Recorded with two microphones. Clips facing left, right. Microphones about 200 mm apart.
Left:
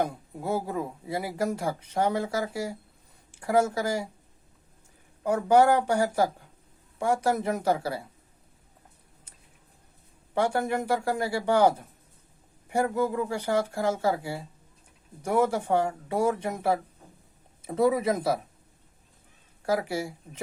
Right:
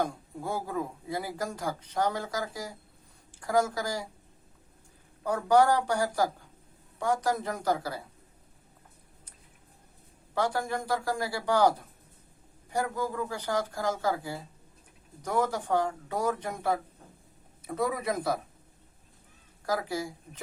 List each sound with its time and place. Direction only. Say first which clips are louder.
0.0 s speech: left 2 dB; 25° left (ahead or behind)
5.2 s speech: left 3 dB; 20° left (ahead or behind)
10.3 s speech: left 4 dB; 25° left (ahead or behind)
12.7 s speech: left 5 dB; 25° left (ahead or behind)